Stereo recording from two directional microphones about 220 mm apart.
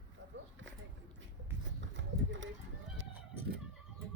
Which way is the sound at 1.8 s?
55° right (ahead or behind).